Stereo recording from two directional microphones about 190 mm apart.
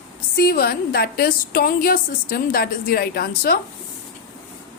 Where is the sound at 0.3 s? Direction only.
50° left (ahead or behind).